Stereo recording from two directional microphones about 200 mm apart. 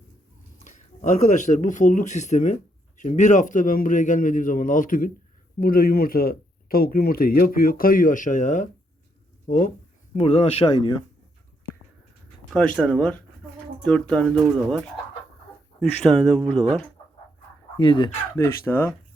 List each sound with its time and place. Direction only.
1.1 s a man's voice: 40° left (ahead or behind)
10.2 s speech: 30° left (ahead or behind)
12.5 s speech: 5° left (ahead or behind)
17.7 s speech: 25° left (ahead or behind)
18.4 s speech: 10° left (ahead or behind)